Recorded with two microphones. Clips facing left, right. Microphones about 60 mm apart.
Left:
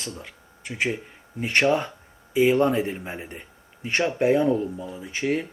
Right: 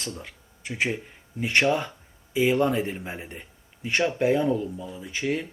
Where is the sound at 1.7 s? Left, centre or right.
Left.